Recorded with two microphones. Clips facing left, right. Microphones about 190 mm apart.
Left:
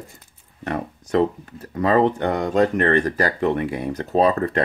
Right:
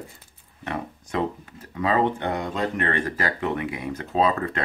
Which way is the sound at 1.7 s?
45° left (ahead or behind).